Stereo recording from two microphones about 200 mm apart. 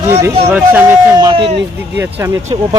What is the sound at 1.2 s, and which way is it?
Speech, 20° right (ahead or behind).